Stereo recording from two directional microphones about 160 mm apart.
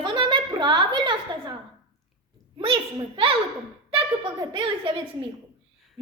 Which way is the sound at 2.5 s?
35° right (ahead or behind).